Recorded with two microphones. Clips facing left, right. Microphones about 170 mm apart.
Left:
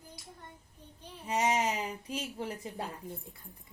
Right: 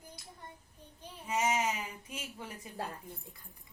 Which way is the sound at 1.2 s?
35° left (ahead or behind).